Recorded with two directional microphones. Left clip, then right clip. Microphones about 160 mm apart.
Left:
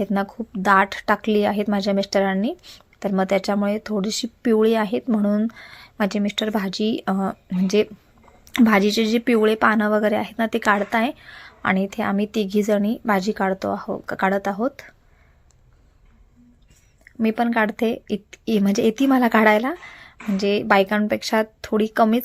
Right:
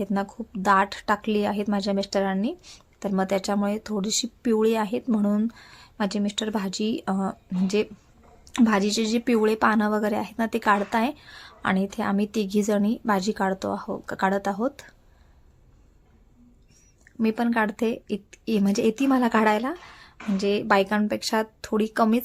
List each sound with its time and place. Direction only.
0.0 s a woman's voice: 15° left (ahead or behind)
17.0 s a woman's voice: 10° left (ahead or behind)